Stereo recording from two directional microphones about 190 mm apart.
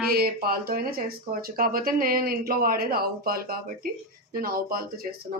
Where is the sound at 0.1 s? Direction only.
50° right (ahead or behind).